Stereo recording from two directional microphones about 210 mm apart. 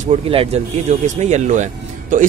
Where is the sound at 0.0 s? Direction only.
30° right (ahead or behind).